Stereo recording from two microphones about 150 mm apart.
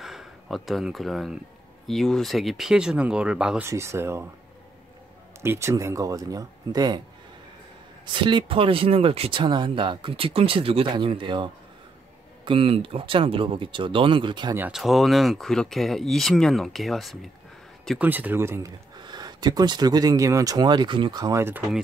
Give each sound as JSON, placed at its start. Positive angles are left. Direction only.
{"t": 0.0, "sound": "speech", "side_deg": 0}
{"t": 3.6, "sound": "speech", "side_deg": -20}
{"t": 5.4, "sound": "speech", "side_deg": -20}
{"t": 8.0, "sound": "speech", "side_deg": -30}
{"t": 14.7, "sound": "speech", "side_deg": 0}
{"t": 17.9, "sound": "speech", "side_deg": -10}
{"t": 18.9, "sound": "speech", "side_deg": -30}